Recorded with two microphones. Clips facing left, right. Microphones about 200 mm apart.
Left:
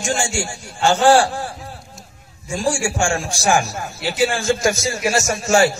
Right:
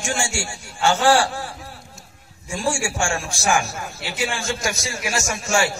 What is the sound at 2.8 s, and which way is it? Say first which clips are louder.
A man's voice: left 4 dB; 35° left (ahead or behind).